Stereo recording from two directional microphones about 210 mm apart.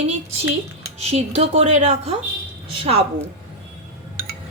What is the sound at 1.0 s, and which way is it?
A woman's voice, 30° right (ahead or behind).